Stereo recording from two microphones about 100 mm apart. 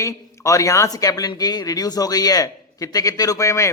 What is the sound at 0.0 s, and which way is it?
A man's voice, 35° left (ahead or behind).